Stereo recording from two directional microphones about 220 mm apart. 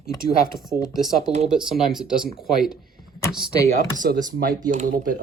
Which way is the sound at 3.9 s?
35° right (ahead or behind).